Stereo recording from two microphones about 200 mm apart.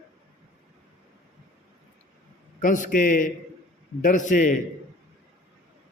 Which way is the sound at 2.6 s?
40° left (ahead or behind).